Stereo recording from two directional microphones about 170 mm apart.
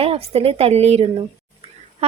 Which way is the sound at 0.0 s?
35° right (ahead or behind).